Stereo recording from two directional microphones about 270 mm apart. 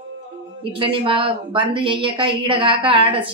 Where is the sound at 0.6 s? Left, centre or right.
Centre.